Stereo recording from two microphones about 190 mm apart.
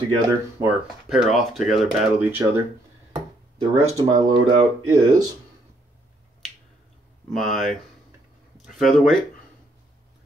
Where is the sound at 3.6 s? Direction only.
15° right (ahead or behind).